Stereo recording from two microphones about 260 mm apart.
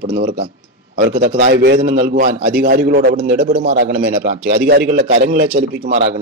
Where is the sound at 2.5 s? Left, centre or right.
Right.